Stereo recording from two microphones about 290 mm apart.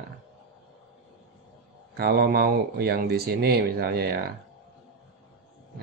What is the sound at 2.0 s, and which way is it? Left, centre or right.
Speech, right.